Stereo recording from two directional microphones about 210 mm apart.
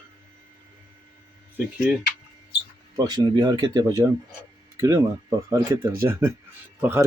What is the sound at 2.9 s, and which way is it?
Speech, 20° right (ahead or behind).